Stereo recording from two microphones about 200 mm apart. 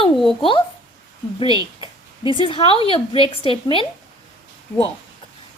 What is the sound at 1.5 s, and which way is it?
Speech, 20° right (ahead or behind).